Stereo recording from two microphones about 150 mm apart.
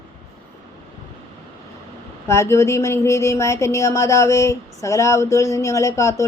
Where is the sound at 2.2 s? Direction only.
20° left (ahead or behind).